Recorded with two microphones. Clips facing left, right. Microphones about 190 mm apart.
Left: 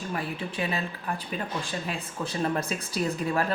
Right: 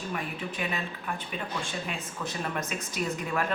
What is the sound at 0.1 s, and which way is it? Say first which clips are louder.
Speech: left 3 dB; 30° left (ahead or behind).